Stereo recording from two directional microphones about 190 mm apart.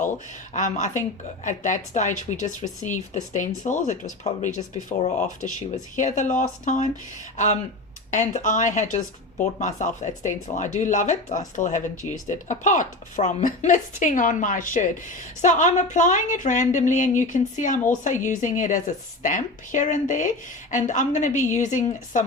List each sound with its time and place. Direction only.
0.0 s a woman's voice: 40° left (ahead or behind)
8.1 s a woman's voice: 40° left (ahead or behind)
12.0 s speech: 25° left (ahead or behind)
12.5 s a woman's voice: 40° left (ahead or behind)